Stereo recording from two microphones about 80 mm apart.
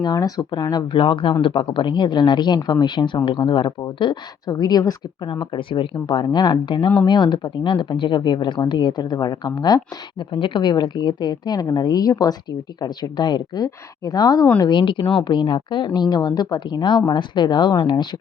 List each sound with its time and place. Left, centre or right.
0.0 s a woman's voice: left
0.9 s a woman's voice: left
5.3 s a woman's voice: left
10.3 s a woman's voice: left
12.8 s a woman's voice: left
14.6 s speech: left